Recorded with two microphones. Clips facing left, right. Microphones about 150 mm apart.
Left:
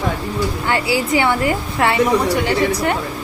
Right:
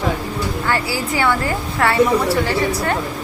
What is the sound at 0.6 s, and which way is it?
A woman's voice, 20° left (ahead or behind).